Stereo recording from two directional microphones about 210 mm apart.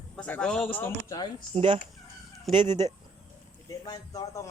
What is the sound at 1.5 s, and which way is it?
Speech, 25° right (ahead or behind).